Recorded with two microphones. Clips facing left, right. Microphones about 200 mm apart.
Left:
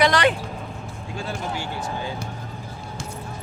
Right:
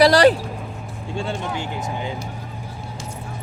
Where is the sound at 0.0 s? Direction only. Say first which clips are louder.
Right 6 dB; 35° right (ahead or behind).